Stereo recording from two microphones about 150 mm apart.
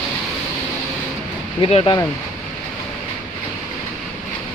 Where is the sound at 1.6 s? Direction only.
35° left (ahead or behind).